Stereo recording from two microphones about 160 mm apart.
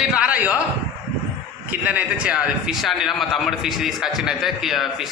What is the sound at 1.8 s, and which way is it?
A man's voice, 10° right (ahead or behind).